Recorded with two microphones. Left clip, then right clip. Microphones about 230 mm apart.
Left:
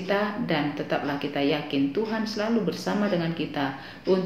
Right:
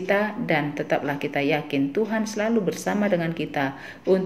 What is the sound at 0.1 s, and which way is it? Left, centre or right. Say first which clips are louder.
Speech: right 3 dB; right.